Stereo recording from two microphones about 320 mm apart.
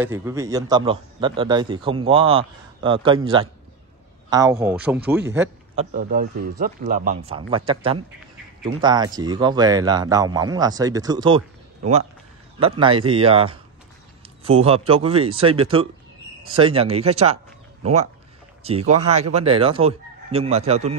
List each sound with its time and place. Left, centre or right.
0.0 s a man's voice: centre
4.3 s speech: centre
5.8 s a man's voice: right
12.5 s a man's voice: centre